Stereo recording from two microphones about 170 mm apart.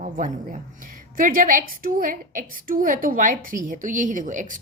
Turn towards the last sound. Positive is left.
turn(degrees=-50)  # may be behind; listen again after turning